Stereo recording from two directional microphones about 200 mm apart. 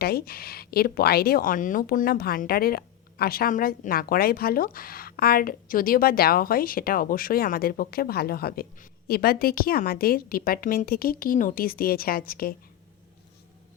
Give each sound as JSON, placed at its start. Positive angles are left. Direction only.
{"t": 0.0, "sound": "speech", "side_deg": 50}